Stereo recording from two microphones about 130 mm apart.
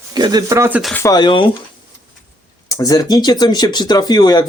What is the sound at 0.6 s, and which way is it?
Speech, 15° right (ahead or behind).